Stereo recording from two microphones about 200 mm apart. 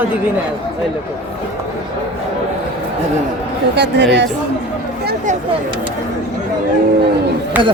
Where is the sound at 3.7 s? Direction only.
55° right (ahead or behind).